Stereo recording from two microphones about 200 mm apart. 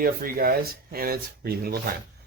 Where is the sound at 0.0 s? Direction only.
45° right (ahead or behind).